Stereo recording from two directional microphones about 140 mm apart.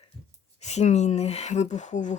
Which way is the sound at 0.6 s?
55° left (ahead or behind).